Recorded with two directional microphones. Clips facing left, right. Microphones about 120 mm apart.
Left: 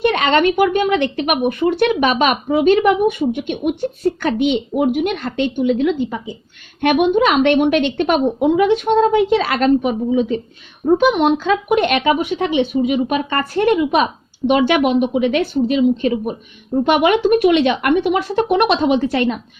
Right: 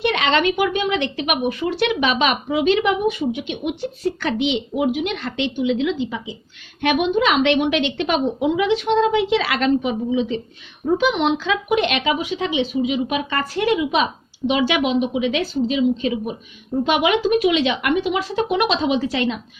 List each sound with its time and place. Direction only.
0.0 s a woman's voice: 50° left (ahead or behind)